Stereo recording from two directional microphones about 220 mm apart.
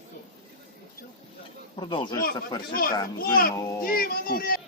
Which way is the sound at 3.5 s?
15° left (ahead or behind).